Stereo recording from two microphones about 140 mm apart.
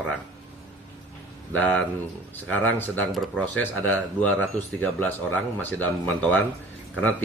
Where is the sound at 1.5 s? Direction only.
10° left (ahead or behind).